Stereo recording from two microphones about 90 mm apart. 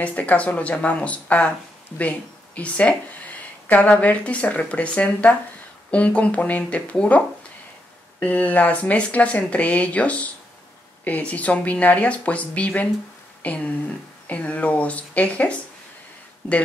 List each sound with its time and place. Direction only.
0.0 s speech: 15° left (ahead or behind)